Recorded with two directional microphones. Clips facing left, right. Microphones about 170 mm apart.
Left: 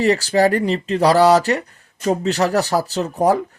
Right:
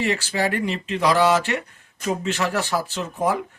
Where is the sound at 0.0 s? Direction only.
40° left (ahead or behind).